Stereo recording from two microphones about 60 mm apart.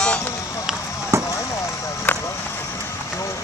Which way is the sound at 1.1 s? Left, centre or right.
Right.